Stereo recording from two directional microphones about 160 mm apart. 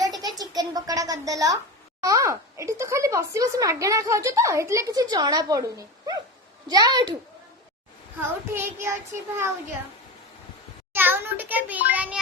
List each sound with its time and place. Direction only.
0.2 s a sound: 25° right (ahead or behind)
2.0 s speech: 20° right (ahead or behind)
8.5 s a child's voice: 15° right (ahead or behind)
10.9 s a child's voice: 15° right (ahead or behind)